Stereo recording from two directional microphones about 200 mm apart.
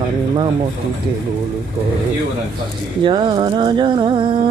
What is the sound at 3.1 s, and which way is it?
Music, 25° right (ahead or behind).